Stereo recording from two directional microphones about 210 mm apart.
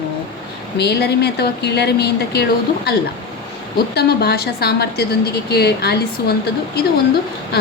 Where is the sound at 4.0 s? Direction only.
50° left (ahead or behind).